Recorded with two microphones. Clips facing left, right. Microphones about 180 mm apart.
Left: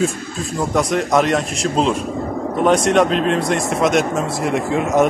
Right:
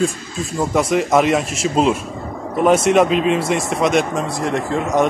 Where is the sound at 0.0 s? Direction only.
Centre (ahead or behind).